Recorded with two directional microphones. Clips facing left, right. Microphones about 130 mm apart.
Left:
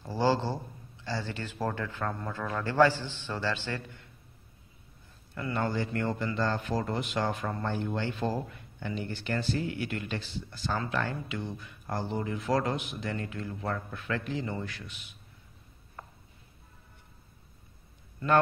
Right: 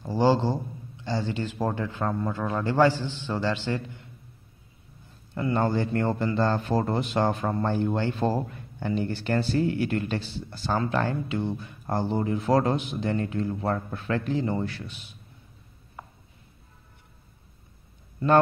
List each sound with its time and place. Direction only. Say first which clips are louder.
0.0 s a man's voice: right 5 dB; 15° right (ahead or behind)
5.3 s a man's voice: right 6 dB; 30° right (ahead or behind)
16.0 s a sound: right 3 dB; 5° right (ahead or behind)